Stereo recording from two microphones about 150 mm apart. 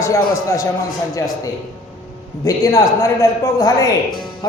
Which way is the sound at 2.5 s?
20° left (ahead or behind).